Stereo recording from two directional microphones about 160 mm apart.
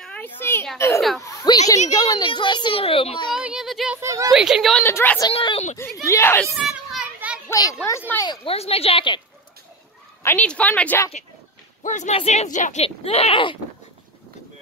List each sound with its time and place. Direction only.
0.0 s a child's voice: 10° left (ahead or behind); by 3.3 s 35° left (ahead or behind)
3.3 s a sound: 5° right (ahead or behind)
4.0 s a woman's voice: 20° right (ahead or behind)
4.3 s a woman's voice: 5° right (ahead or behind)
4.8 s speech: 15° left (ahead or behind)
5.3 s speech: 35° left (ahead or behind)
6.0 s speech: 15° left (ahead or behind)
6.7 s children playing: 5° right (ahead or behind)
7.4 s children playing: 20° left (ahead or behind)
8.3 s speech: 40° left (ahead or behind)
10.2 s speech: 10° left (ahead or behind)
11.8 s speech: 50° left (ahead or behind); by 13.6 s 35° left (ahead or behind)